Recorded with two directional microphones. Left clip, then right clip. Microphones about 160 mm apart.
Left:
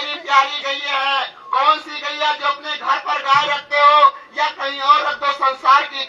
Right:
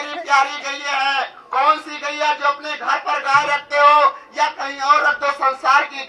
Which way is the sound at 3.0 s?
45° right (ahead or behind).